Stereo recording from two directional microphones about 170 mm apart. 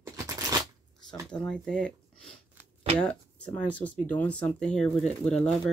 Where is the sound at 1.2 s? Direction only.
5° left (ahead or behind).